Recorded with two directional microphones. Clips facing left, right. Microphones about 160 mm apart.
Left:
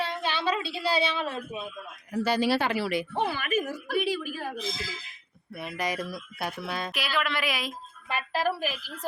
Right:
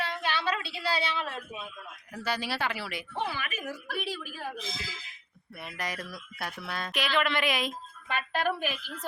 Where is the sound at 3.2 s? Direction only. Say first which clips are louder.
Left 4 dB; 50° left (ahead or behind).